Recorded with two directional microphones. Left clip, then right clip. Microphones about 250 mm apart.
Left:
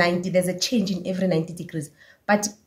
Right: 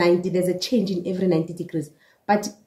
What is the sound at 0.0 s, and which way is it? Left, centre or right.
Speech, left.